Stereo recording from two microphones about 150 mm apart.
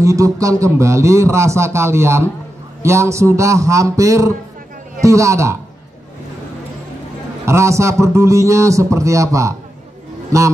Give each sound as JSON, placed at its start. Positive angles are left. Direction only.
{"t": 0.0, "sound": "a man's voice", "side_deg": -20}
{"t": 7.4, "sound": "a man's voice", "side_deg": -20}